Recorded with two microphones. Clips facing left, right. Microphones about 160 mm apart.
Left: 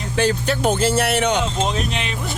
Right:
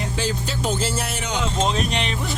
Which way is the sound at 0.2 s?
60° left (ahead or behind).